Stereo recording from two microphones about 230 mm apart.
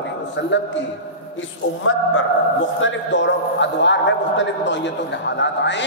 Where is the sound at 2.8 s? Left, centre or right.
Left.